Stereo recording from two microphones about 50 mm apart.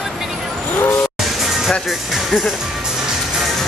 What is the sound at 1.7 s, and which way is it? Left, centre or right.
Speech, centre.